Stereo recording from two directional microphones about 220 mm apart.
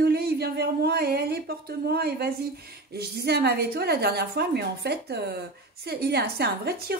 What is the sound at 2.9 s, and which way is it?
Speech, 45° right (ahead or behind).